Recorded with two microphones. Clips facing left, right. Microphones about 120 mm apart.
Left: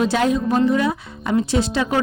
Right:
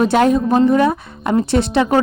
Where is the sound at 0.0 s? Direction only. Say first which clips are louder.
Right 5 dB; 50° right (ahead or behind).